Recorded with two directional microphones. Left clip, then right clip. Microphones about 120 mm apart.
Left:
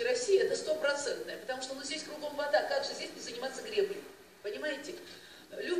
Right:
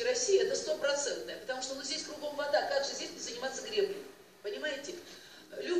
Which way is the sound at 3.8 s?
5° right (ahead or behind).